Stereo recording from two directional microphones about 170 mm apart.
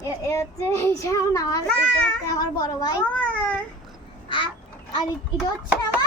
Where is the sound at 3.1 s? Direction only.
5° left (ahead or behind).